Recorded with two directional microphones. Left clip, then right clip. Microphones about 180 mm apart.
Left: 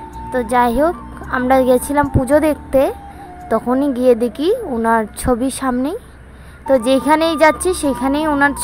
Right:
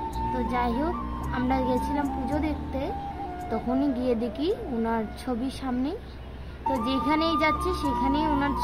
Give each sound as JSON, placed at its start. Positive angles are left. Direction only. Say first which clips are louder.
{"t": 0.3, "sound": "a woman's voice", "louder": "left 14 dB", "side_deg": 45}